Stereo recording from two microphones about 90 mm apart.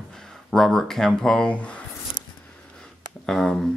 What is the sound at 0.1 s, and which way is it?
Speech, 5° left (ahead or behind).